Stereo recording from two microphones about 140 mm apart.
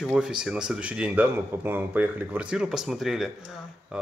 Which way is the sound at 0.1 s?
5° right (ahead or behind).